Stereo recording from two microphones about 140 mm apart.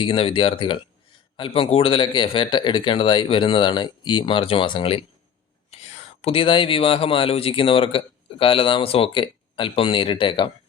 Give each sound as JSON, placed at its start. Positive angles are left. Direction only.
{"t": 0.0, "sound": "speech", "side_deg": 40}